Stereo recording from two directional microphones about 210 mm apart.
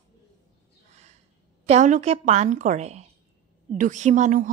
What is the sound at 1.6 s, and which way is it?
Speech, 35° right (ahead or behind).